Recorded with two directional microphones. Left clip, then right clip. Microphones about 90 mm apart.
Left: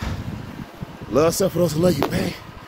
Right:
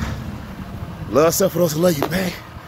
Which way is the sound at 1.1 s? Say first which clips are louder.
Right 3 dB; 10° left (ahead or behind).